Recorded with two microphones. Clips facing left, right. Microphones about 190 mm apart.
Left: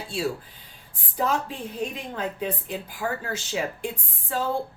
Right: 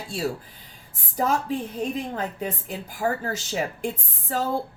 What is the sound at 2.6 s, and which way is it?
A woman's voice, 45° right (ahead or behind).